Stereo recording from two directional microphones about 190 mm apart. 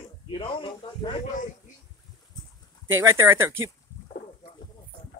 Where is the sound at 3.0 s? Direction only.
15° right (ahead or behind).